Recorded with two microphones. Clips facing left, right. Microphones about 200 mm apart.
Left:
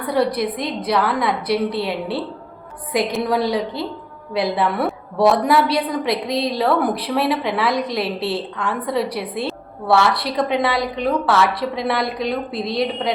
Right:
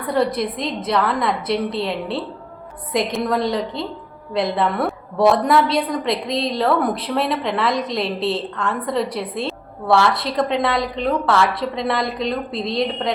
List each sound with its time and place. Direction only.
0.2 s a woman's voice: 5° left (ahead or behind)
8.2 s a woman's voice: 25° right (ahead or behind)
8.5 s a woman's voice: 5° left (ahead or behind)